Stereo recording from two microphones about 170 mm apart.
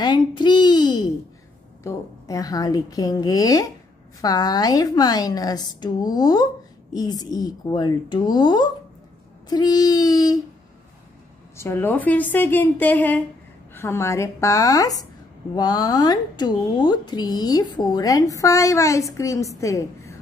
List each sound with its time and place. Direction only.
0.0 s speech: 25° left (ahead or behind)
11.5 s a woman's voice: 15° left (ahead or behind)